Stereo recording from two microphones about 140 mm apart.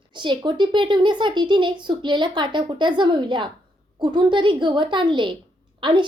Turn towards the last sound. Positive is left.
turn(degrees=-35)  # may be behind; listen again after turning